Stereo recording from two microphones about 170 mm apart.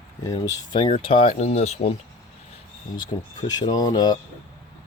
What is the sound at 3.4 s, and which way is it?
Speech, 20° left (ahead or behind).